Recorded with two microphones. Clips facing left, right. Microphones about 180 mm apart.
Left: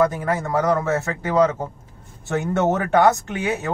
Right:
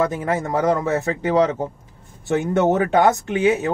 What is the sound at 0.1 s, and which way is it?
Speech, 20° right (ahead or behind).